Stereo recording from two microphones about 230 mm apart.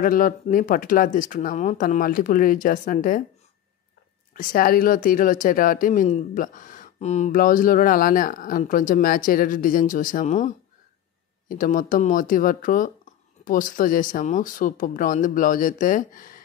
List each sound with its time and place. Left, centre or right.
0.0 s a woman's voice: left
4.3 s a woman's voice: left